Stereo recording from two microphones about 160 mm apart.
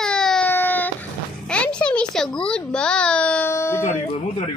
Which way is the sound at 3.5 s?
15° left (ahead or behind).